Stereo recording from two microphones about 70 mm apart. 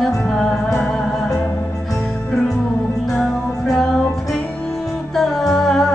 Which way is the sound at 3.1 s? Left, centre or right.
Centre.